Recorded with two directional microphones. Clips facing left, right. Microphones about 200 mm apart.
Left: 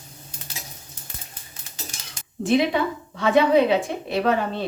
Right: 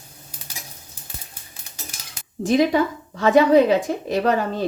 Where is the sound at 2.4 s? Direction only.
40° right (ahead or behind).